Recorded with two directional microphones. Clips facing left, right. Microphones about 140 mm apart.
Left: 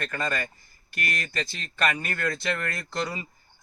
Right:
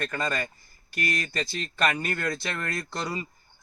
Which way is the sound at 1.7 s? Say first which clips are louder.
Right 1 dB; centre (ahead or behind).